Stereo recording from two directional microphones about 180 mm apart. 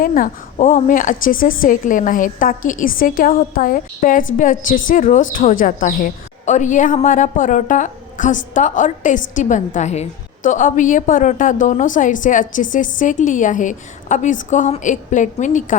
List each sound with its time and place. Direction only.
0.0 s a woman's voice: 50° left (ahead or behind)